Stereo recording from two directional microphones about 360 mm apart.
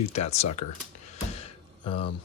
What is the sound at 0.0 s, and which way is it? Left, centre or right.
Speech, centre.